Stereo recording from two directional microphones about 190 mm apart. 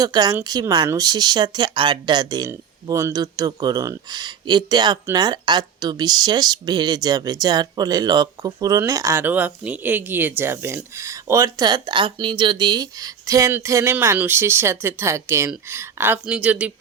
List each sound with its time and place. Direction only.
0.0 s speech: 20° right (ahead or behind)